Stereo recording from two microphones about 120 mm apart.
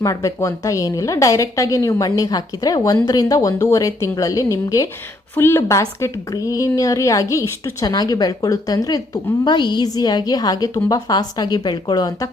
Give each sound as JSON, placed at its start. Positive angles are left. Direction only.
{"t": 0.0, "sound": "a woman's voice", "side_deg": 25}